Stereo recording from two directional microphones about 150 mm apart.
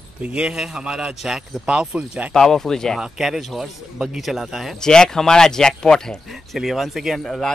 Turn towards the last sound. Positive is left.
turn(degrees=0)  # may be behind; listen again after turning